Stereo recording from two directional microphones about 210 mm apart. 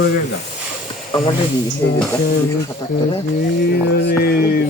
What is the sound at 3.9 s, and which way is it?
Music, 50° left (ahead or behind).